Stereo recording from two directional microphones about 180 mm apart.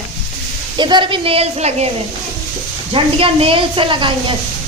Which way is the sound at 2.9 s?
30° right (ahead or behind).